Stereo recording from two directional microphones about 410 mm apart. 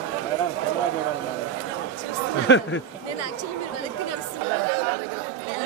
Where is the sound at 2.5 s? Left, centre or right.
Left.